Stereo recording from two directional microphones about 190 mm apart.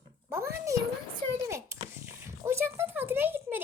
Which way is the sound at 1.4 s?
15° right (ahead or behind).